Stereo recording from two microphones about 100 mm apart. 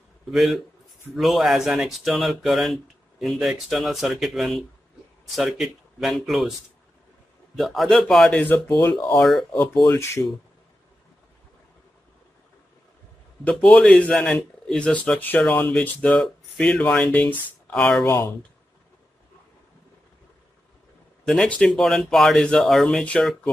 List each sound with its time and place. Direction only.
0.3 s speech: centre (ahead or behind)
7.5 s speech: centre (ahead or behind)
8.5 s speech: 20° left (ahead or behind)
9.2 s speech: 5° left (ahead or behind)
9.6 s speech: 35° left (ahead or behind)
13.4 s speech: 15° left (ahead or behind)
21.5 s speech: 5° left (ahead or behind)